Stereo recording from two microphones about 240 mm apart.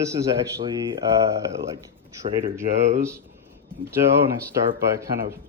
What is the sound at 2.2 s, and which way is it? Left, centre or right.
Speech, right.